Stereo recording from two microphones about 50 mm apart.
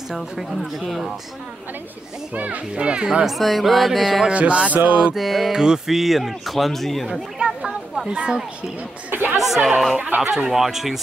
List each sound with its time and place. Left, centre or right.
0.1 s speech: centre
2.3 s speech: right
2.7 s music: right
3.3 s speech: centre
4.3 s music: right
5.1 s speech: centre
7.1 s speech: centre
8.1 s music: right
9.1 s speech: right
9.4 s speech: centre
9.9 s music: right
10.5 s speech: centre